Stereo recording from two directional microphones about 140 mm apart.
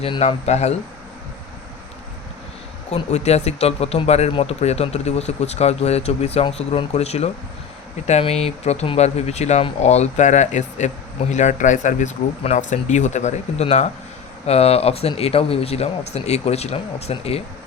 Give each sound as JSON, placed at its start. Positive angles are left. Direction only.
{"t": 0.0, "sound": "speech", "side_deg": 45}
{"t": 2.9, "sound": "speech", "side_deg": 50}